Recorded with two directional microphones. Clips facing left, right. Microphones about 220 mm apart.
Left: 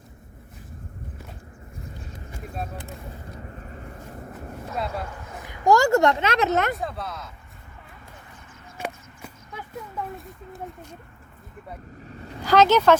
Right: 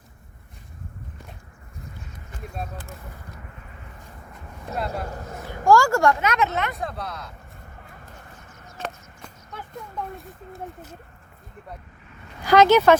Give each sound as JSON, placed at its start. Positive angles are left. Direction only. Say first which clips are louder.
{"t": 3.3, "sound": "vehicle", "louder": "left 5 dB", "side_deg": 35}
{"t": 4.7, "sound": "speech", "louder": "right 1 dB", "side_deg": 0}
{"t": 5.0, "sound": "a man's voice", "louder": "right 4 dB", "side_deg": -40}
{"t": 5.6, "sound": "speech", "louder": "even", "side_deg": 20}
{"t": 6.7, "sound": "speech", "louder": "even", "side_deg": 0}
{"t": 8.8, "sound": "a sound", "louder": "left 1 dB", "side_deg": 10}
{"t": 9.7, "sound": "speech", "louder": "left 1 dB", "side_deg": 0}
{"t": 12.0, "sound": "a sound", "louder": "left 7 dB", "side_deg": 35}
{"t": 12.5, "sound": "speech", "louder": "right 2 dB", "side_deg": -10}